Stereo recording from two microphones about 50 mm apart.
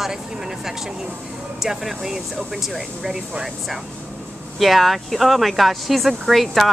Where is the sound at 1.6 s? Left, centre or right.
Centre.